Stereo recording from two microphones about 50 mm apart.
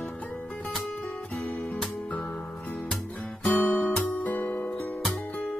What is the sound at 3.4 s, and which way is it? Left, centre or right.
Music, left.